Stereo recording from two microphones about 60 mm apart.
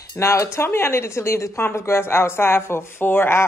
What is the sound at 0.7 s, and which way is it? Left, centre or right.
A woman's voice, left.